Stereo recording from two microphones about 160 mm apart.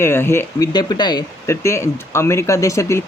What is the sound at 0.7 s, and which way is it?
Speech, 25° left (ahead or behind).